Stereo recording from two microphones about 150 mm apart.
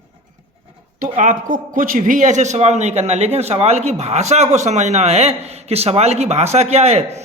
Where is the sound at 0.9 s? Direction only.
60° right (ahead or behind).